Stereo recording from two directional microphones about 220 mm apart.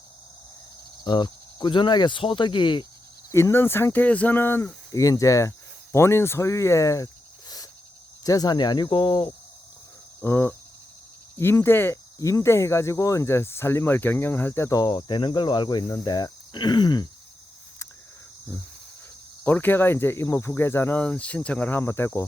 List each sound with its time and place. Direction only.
1.0 s cricket: 20° left (ahead or behind)
3.3 s speech: 10° left (ahead or behind)
8.2 s cricket: 15° left (ahead or behind)
10.2 s cricket: 10° left (ahead or behind)
11.3 s speech: 10° left (ahead or behind)
19.5 s speech: 10° left (ahead or behind)